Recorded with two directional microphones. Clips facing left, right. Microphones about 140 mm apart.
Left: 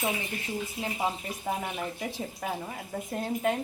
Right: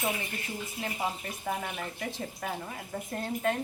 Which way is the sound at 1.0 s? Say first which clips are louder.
Left 3 dB; 15° left (ahead or behind).